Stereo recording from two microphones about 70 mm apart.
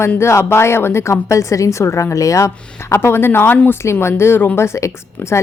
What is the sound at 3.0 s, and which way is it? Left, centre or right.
Speech, left.